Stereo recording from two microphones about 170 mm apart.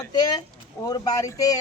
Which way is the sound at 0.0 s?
25° left (ahead or behind).